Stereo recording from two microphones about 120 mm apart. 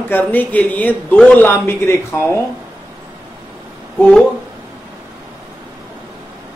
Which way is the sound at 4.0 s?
10° left (ahead or behind).